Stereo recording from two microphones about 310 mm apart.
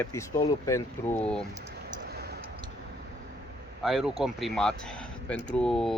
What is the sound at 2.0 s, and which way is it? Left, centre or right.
Tick-tock, right.